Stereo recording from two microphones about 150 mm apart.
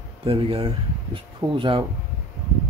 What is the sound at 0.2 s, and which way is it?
Speech, 40° right (ahead or behind).